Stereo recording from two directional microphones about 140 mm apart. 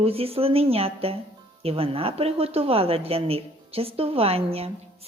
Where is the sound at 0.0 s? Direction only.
45° right (ahead or behind).